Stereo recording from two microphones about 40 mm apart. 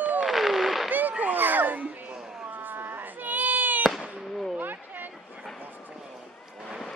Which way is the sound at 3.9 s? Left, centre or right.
Centre.